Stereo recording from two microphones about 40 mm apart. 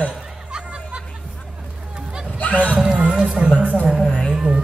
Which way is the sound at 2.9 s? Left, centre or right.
Right.